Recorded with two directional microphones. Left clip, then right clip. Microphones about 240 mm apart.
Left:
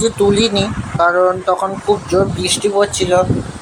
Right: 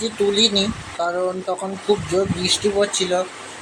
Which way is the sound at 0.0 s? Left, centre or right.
Centre.